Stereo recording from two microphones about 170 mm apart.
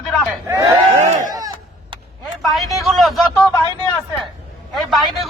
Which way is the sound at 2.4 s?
Centre (ahead or behind).